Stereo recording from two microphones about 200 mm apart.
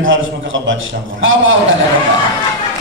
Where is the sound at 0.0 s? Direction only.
70° right (ahead or behind).